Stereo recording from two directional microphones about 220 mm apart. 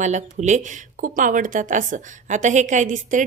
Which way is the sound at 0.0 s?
30° right (ahead or behind).